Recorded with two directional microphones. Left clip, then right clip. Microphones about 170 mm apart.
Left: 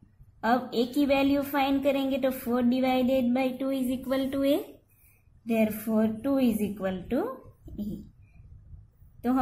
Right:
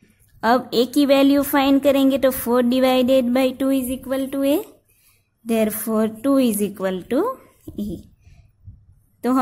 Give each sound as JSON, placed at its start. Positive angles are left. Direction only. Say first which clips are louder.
{"t": 0.4, "sound": "a woman's voice", "louder": "right 9 dB", "side_deg": -55}
{"t": 5.5, "sound": "a woman's voice", "louder": "right 7 dB", "side_deg": -50}